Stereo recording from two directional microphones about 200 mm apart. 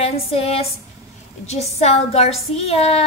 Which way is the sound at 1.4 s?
35° left (ahead or behind).